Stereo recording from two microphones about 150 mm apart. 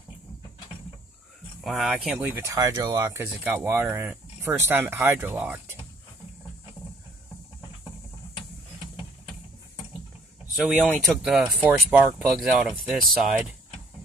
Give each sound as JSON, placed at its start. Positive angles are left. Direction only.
{"t": 1.6, "sound": "speech", "side_deg": 0}
{"t": 2.3, "sound": "speech", "side_deg": -20}
{"t": 10.5, "sound": "speech", "side_deg": 0}